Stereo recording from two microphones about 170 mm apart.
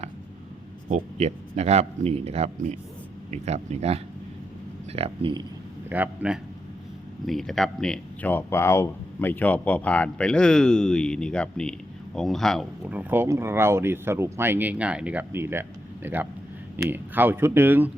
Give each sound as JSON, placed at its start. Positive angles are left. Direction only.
{"t": 0.9, "sound": "speech", "side_deg": -45}
{"t": 5.9, "sound": "speech", "side_deg": -10}
{"t": 12.9, "sound": "speech", "side_deg": -10}